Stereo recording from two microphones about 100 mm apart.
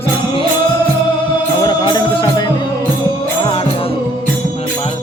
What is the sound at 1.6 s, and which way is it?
Music, 45° left (ahead or behind).